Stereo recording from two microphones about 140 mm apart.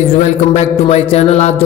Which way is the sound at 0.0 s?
55° left (ahead or behind).